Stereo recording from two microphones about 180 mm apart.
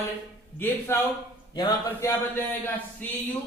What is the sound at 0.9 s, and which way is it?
Speech, 15° left (ahead or behind).